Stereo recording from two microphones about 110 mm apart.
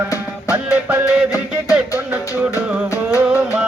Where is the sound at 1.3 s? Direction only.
30° left (ahead or behind).